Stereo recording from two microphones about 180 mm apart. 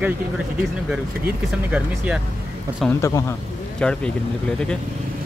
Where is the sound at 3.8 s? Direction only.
5° left (ahead or behind).